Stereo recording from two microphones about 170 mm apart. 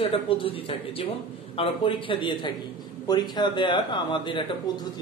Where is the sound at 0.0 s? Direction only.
30° left (ahead or behind).